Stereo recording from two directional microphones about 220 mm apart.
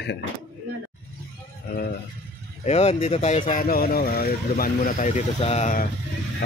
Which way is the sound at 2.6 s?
30° left (ahead or behind).